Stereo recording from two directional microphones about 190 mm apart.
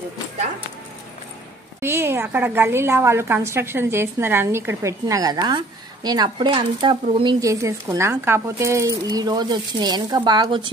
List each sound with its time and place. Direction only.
1.8 s a woman's voice: 10° right (ahead or behind)